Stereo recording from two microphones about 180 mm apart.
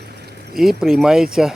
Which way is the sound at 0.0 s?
65° right (ahead or behind).